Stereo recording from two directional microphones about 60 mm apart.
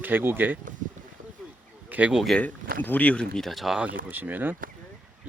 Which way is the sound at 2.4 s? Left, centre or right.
Left.